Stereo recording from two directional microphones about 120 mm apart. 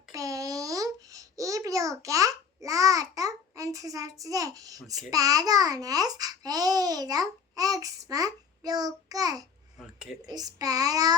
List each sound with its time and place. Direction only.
0.1 s babbling: 30° right (ahead or behind)
5.1 s a child's voice: 30° right (ahead or behind)
9.7 s speech: centre (ahead or behind)
10.2 s a child's voice: 30° right (ahead or behind)